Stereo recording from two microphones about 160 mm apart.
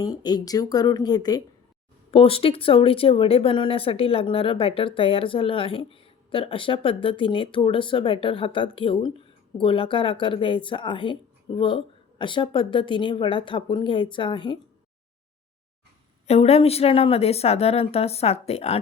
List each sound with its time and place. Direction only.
0.0 s speech: 25° left (ahead or behind)
2.0 s speech: 35° left (ahead or behind)
16.2 s speech: 40° left (ahead or behind)